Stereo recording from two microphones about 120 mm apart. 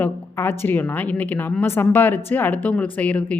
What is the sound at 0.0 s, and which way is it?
Speech, 20° left (ahead or behind).